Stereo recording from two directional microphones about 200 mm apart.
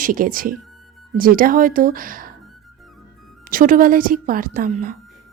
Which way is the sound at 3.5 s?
45° right (ahead or behind).